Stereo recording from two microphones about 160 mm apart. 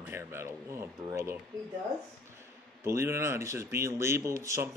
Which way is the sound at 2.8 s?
15° right (ahead or behind).